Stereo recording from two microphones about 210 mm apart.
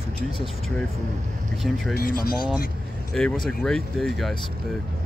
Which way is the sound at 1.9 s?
45° left (ahead or behind).